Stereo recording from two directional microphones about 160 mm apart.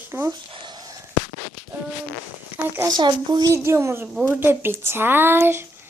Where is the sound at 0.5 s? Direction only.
30° right (ahead or behind).